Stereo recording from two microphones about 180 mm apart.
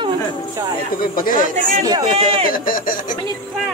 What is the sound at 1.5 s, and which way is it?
Speech, 45° right (ahead or behind).